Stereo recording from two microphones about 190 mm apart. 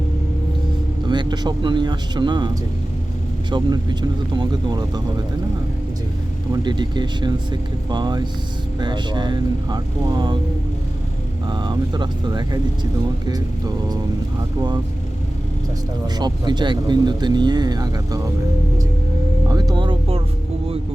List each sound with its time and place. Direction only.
1.0 s speech: 25° right (ahead or behind)
3.5 s speech: 25° right (ahead or behind)
6.5 s speech: 25° right (ahead or behind)
11.4 s speech: 25° right (ahead or behind)
16.1 s speech: 20° right (ahead or behind)
19.5 s music: 20° right (ahead or behind)